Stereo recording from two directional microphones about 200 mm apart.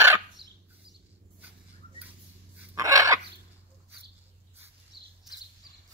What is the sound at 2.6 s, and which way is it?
Dog, 15° right (ahead or behind).